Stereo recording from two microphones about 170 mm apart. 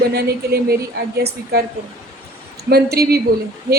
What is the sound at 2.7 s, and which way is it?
Speech, 70° right (ahead or behind).